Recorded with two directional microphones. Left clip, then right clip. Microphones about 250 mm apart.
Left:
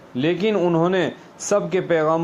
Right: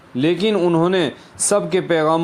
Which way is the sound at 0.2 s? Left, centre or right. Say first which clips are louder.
Right 2 dB; right.